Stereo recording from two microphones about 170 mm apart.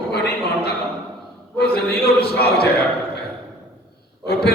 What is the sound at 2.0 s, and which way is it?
Speech, 70° left (ahead or behind).